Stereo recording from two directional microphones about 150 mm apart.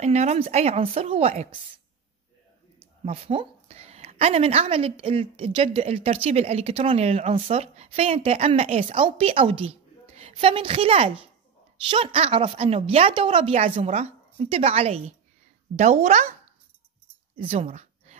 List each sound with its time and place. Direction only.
0.0 s a woman's voice: 50° right (ahead or behind)
2.8 s a woman's voice: 40° right (ahead or behind)
10.3 s a woman's voice: 35° right (ahead or behind); by 16.3 s 50° right (ahead or behind)
17.4 s speech: 40° right (ahead or behind)